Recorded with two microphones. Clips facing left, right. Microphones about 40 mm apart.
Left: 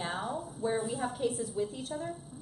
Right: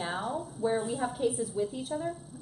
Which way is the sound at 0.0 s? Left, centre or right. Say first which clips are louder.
Right 2 dB; centre.